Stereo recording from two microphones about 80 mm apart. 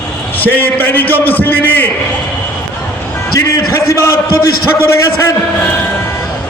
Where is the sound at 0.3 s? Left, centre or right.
Left.